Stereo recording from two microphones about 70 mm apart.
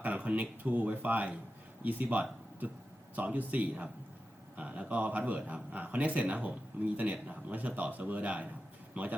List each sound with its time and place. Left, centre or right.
0.0 s speech: right